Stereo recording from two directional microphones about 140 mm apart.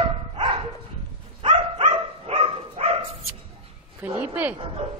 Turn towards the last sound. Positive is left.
turn(degrees=-10)  # may be behind; listen again after turning